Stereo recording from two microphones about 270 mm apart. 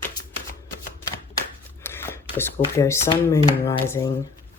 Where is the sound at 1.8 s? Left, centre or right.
Centre.